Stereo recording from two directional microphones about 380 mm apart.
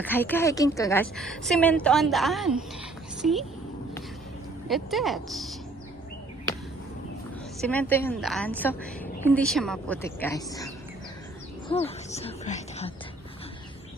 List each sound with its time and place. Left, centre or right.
0.0 s a woman's voice: centre
4.7 s a woman's voice: centre
7.7 s a woman's voice: centre
11.7 s speech: centre